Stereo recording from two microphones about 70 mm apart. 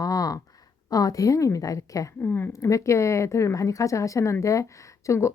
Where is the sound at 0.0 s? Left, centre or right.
Left.